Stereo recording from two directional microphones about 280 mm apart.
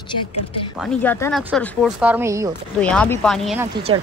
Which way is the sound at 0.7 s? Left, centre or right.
Centre.